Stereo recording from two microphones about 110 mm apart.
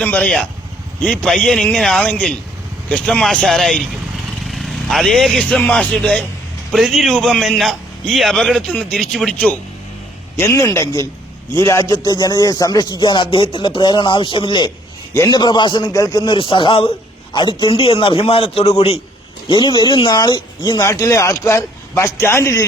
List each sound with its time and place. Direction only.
0.0 s a man's voice: 10° left (ahead or behind)
10.3 s a man's voice: 25° left (ahead or behind); by 18.9 s 65° left (ahead or behind)
19.5 s speech: 45° left (ahead or behind); by 22.6 s 25° left (ahead or behind)